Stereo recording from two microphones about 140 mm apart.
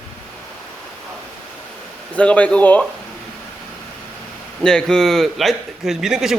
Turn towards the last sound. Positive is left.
turn(degrees=-5)  # may be behind; listen again after turning